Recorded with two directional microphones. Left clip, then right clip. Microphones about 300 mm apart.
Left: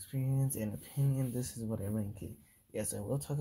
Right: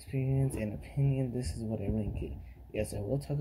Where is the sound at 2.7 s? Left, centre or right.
Left.